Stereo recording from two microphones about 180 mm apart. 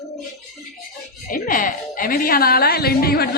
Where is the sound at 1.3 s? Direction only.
50° left (ahead or behind).